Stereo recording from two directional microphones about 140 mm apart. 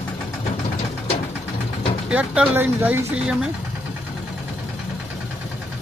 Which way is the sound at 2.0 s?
5° right (ahead or behind).